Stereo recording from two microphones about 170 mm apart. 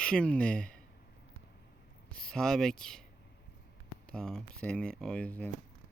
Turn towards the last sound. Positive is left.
turn(degrees=10)  # may be behind; listen again after turning